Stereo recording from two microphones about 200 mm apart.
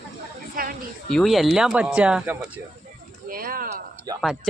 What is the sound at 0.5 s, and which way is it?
Speech, 45° right (ahead or behind).